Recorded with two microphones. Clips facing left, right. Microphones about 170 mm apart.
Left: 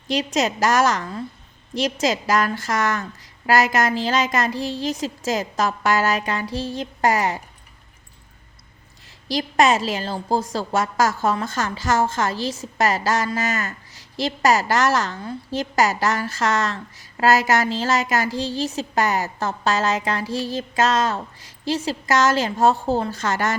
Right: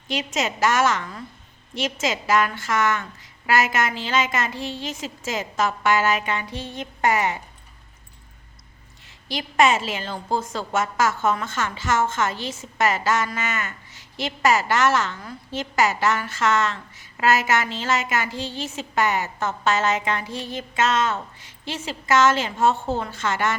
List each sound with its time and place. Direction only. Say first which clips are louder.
0.1 s a woman's voice: left 4 dB; 40° left (ahead or behind)
9.3 s a woman's voice: left 2 dB; 40° left (ahead or behind)